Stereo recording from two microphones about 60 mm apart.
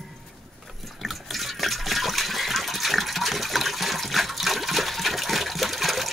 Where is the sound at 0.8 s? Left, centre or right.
Centre.